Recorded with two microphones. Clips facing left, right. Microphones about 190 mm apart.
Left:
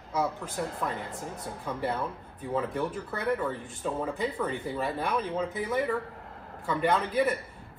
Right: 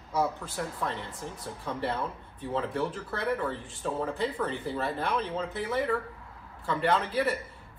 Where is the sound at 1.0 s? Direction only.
55° left (ahead or behind).